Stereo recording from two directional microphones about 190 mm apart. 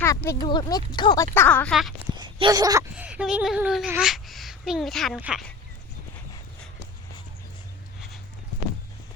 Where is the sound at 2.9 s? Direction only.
5° right (ahead or behind).